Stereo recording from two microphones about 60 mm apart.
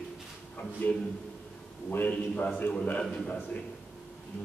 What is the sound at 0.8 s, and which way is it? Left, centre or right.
A man's voice, left.